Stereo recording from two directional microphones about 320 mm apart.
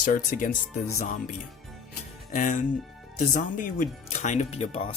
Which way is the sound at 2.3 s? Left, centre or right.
Left.